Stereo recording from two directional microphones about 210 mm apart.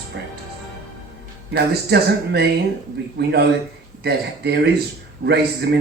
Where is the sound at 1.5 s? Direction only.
50° right (ahead or behind).